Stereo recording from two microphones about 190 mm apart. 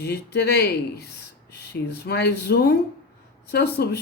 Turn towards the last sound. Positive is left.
turn(degrees=60)  # may be behind; listen again after turning